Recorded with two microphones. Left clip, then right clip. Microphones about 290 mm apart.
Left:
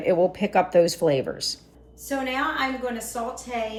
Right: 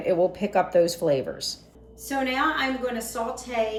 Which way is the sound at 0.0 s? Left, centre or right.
Left.